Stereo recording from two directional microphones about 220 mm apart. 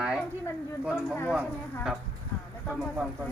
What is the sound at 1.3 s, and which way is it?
A man's voice, 5° right (ahead or behind).